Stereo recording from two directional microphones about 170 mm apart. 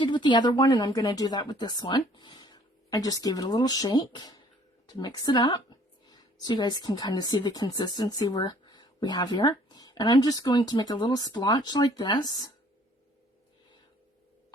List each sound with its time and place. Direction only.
0.0 s speech: 30° left (ahead or behind)